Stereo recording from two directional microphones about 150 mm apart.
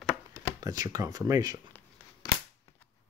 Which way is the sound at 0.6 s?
25° right (ahead or behind).